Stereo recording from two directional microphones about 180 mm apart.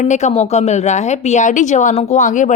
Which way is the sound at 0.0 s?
40° left (ahead or behind).